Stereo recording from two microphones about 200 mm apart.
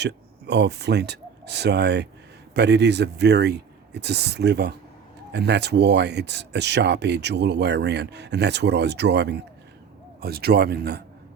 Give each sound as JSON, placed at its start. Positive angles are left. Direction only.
{"t": 0.0, "sound": "speech", "side_deg": -60}